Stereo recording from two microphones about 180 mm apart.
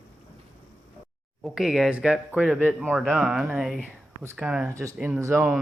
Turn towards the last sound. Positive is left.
turn(degrees=-15)  # may be behind; listen again after turning